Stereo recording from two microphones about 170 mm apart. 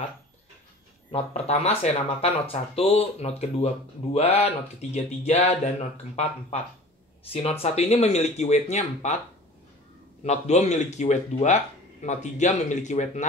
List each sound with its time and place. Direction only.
1.1 s speech: 40° left (ahead or behind)
7.6 s speech: 40° left (ahead or behind)
10.2 s speech: 40° left (ahead or behind)